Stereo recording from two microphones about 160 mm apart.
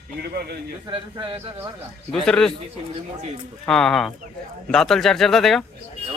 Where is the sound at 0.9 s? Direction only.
30° right (ahead or behind).